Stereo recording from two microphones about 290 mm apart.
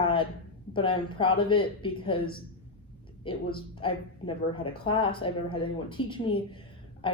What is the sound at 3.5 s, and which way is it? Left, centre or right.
Speech, centre.